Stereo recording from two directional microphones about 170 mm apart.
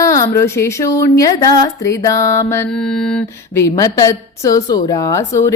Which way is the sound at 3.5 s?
20° left (ahead or behind).